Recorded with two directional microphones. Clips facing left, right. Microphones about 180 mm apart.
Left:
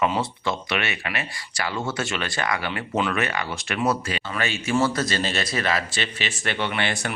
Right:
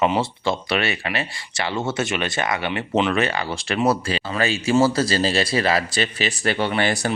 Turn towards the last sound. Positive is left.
turn(degrees=-40)  # may be behind; listen again after turning